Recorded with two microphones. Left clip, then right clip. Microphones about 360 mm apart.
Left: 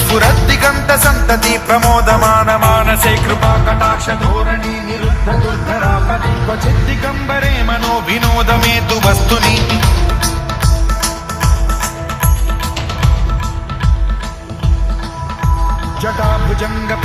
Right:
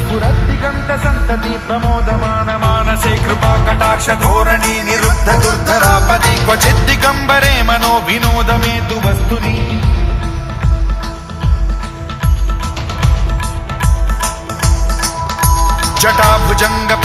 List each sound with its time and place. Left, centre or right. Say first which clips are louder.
0.1 s music: left 8 dB; left
1.8 s music: left 7 dB; left; by 5.1 s right
5.3 s music: right 5 dB; right; by 9.9 s left
14.6 s music: right 8 dB; right
16.6 s music: right 6 dB; centre